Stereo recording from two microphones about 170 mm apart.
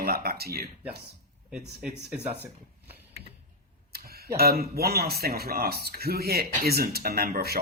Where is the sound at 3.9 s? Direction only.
65° right (ahead or behind).